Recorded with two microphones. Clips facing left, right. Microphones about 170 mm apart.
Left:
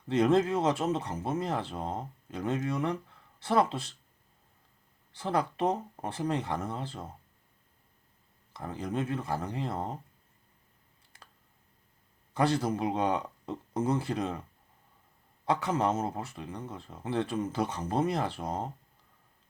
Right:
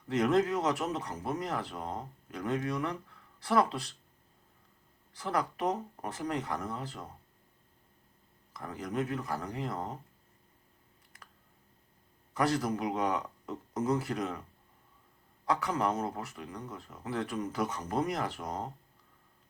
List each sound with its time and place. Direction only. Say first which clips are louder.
0.1 s speech: left 3 dB; 25° left (ahead or behind)
5.1 s speech: left 3 dB; 25° left (ahead or behind)
8.5 s speech: left 1 dB; 30° left (ahead or behind)
12.3 s speech: left 2 dB; 30° left (ahead or behind)
15.4 s speech: left 2 dB; 25° left (ahead or behind)